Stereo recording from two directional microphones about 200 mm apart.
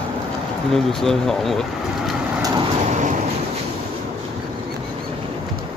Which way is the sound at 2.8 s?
35° right (ahead or behind).